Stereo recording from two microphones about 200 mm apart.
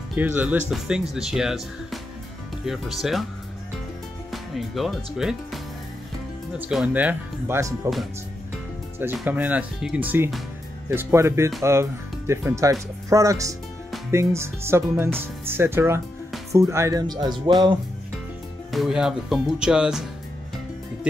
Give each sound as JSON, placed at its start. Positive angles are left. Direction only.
{"t": 0.1, "sound": "speech", "side_deg": -5}
{"t": 4.3, "sound": "speech", "side_deg": 0}
{"t": 6.6, "sound": "speech", "side_deg": -5}
{"t": 9.0, "sound": "speech", "side_deg": -5}
{"t": 18.7, "sound": "speech", "side_deg": 0}